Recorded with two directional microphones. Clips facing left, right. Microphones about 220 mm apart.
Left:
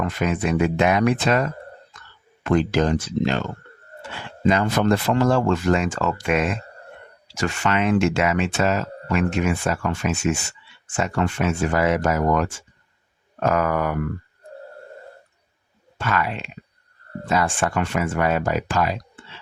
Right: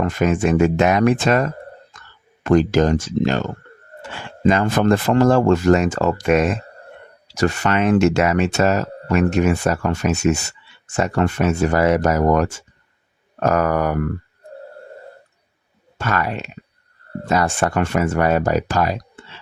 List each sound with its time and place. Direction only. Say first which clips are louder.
0.0 s speech: right 5 dB; 45° right (ahead or behind)
4.4 s speech: right 3 dB; 50° right (ahead or behind)
16.0 s speech: right 2 dB; 45° right (ahead or behind)